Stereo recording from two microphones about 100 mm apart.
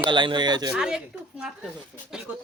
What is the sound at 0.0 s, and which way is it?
Speech, 50° right (ahead or behind).